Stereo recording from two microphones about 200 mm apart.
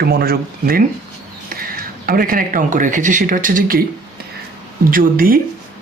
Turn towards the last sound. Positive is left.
turn(degrees=-45)  # may be behind; listen again after turning